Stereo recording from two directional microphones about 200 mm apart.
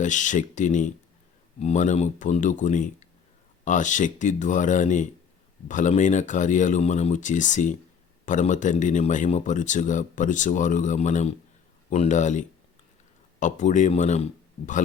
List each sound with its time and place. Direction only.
0.0 s speech: 40° left (ahead or behind)